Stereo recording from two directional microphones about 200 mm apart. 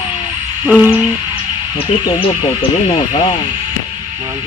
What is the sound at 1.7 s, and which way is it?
Speech, 25° left (ahead or behind).